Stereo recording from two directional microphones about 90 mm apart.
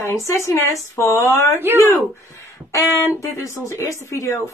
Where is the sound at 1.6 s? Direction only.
25° right (ahead or behind).